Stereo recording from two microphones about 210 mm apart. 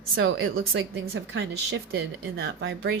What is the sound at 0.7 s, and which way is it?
Speech, 65° right (ahead or behind).